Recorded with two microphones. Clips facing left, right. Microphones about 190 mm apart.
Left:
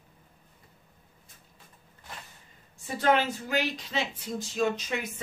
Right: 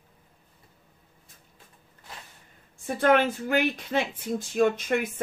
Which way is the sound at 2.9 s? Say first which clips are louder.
Right 4 dB; 55° right (ahead or behind).